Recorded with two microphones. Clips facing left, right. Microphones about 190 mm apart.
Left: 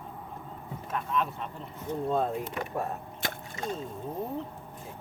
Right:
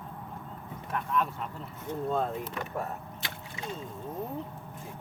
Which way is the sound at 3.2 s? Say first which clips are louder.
Left 8 dB; 45° left (ahead or behind).